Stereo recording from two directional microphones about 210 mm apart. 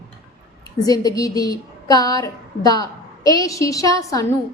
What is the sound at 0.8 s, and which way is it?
A woman's voice, 15° left (ahead or behind).